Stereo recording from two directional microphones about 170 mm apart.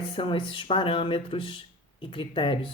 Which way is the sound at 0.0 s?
30° left (ahead or behind).